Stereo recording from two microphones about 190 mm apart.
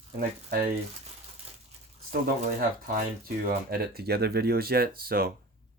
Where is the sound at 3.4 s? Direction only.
50° right (ahead or behind).